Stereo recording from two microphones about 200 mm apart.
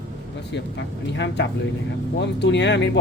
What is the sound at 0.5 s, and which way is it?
Speech, 65° left (ahead or behind).